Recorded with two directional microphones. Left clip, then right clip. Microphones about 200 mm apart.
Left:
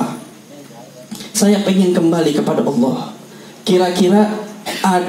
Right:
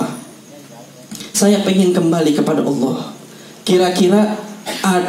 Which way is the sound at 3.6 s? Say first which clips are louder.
Even; 20° right (ahead or behind).